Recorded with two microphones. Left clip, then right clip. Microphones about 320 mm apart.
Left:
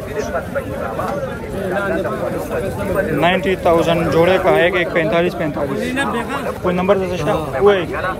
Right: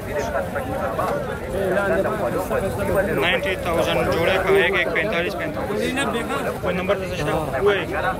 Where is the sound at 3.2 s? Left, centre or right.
Centre.